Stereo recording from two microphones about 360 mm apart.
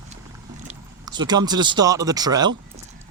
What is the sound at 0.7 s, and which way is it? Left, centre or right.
Speech, centre.